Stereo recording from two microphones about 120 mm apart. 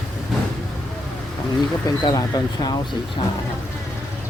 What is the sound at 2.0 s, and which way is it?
Speech, 35° left (ahead or behind).